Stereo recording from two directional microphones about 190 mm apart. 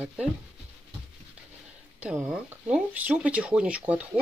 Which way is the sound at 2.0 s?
5° right (ahead or behind).